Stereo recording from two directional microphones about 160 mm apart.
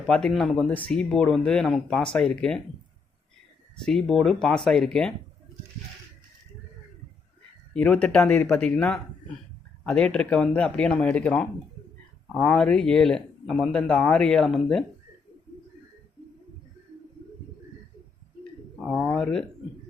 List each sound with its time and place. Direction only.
0.1 s speech: 5° left (ahead or behind)
3.8 s speech: 5° left (ahead or behind)
7.7 s speech: 10° left (ahead or behind)
18.8 s speech: centre (ahead or behind)